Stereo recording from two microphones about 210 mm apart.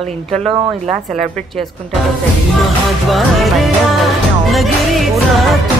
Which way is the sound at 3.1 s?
Centre (ahead or behind).